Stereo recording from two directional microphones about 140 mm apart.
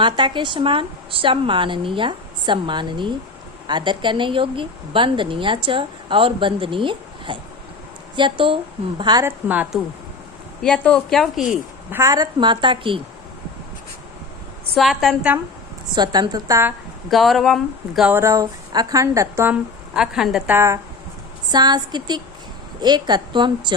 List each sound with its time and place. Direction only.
0.0 s a woman's voice: 35° right (ahead or behind)
9.2 s a woman's voice: 10° right (ahead or behind)
10.6 s speech: 5° left (ahead or behind)
11.9 s a woman's voice: 20° right (ahead or behind); by 13.0 s 35° right (ahead or behind)
14.8 s speech: centre (ahead or behind)
16.0 s a woman's voice: 30° right (ahead or behind)
17.1 s speech: centre (ahead or behind)
18.1 s a woman's voice: 20° right (ahead or behind)
19.9 s speech: 5° right (ahead or behind)
21.5 s a woman's voice: 30° right (ahead or behind)